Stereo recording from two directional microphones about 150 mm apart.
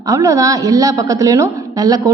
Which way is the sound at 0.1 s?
20° right (ahead or behind).